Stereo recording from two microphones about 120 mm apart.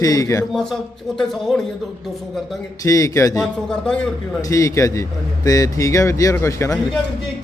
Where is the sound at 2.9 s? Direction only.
30° left (ahead or behind).